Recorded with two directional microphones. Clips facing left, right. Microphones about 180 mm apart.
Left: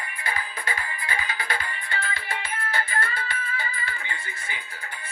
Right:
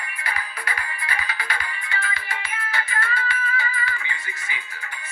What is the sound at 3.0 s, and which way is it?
Music, 30° left (ahead or behind).